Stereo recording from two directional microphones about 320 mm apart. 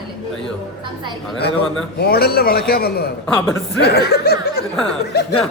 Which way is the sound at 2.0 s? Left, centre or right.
Left.